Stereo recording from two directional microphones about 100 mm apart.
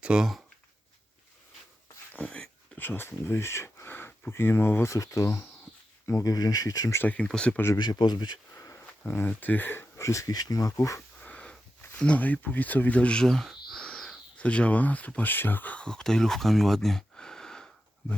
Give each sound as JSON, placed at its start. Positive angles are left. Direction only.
{"t": 0.0, "sound": "speech", "side_deg": -10}
{"t": 2.1, "sound": "speech", "side_deg": 10}
{"t": 7.0, "sound": "speech", "side_deg": 15}
{"t": 7.8, "sound": "speech", "side_deg": 50}
{"t": 8.5, "sound": "speech", "side_deg": 30}
{"t": 11.2, "sound": "sniff", "side_deg": 15}
{"t": 11.9, "sound": "speech", "side_deg": 15}